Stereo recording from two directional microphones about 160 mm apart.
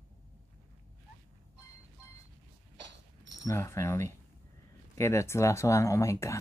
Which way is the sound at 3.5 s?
15° left (ahead or behind).